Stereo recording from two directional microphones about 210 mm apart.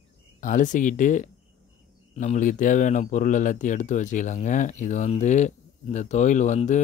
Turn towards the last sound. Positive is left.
turn(degrees=35)  # may be behind; listen again after turning